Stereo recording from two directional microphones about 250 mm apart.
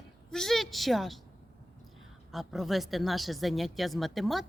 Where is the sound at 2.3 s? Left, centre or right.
Centre.